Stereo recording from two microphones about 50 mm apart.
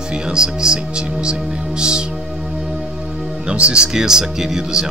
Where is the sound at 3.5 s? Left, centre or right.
Right.